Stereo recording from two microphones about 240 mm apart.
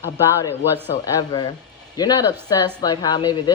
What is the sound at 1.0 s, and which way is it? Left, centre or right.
Speech, centre.